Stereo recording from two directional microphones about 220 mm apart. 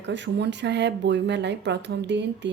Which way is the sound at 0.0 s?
55° right (ahead or behind).